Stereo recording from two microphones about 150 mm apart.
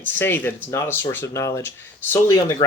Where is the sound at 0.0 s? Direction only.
15° left (ahead or behind).